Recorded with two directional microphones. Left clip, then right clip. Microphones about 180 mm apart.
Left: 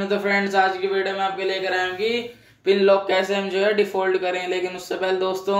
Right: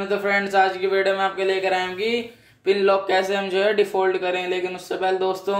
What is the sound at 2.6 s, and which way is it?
Speech, 5° right (ahead or behind).